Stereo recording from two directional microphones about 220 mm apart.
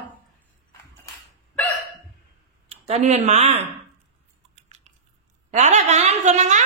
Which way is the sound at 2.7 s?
30° right (ahead or behind).